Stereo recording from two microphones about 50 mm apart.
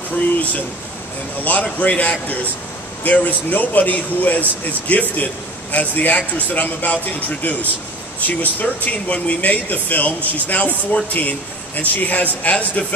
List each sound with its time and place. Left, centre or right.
1.4 s speech: left